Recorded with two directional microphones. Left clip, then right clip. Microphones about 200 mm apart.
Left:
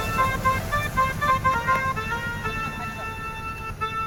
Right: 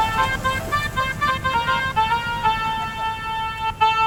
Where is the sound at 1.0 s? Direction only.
20° right (ahead or behind).